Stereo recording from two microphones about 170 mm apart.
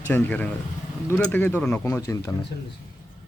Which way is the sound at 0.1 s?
10° left (ahead or behind).